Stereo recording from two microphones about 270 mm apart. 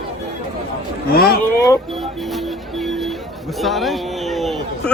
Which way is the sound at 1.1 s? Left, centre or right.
Left.